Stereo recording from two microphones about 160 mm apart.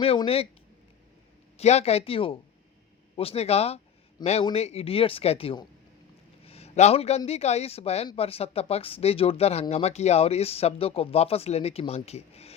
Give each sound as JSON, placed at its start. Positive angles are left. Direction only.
{"t": 0.0, "sound": "speech", "side_deg": 35}
{"t": 1.5, "sound": "speech", "side_deg": 40}
{"t": 6.4, "sound": "a sound", "side_deg": 40}
{"t": 7.3, "sound": "speech", "side_deg": 40}